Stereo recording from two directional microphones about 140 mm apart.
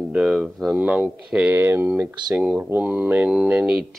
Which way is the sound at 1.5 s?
20° right (ahead or behind).